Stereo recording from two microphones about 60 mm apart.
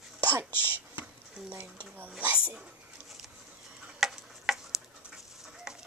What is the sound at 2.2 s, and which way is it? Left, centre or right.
Speech, right.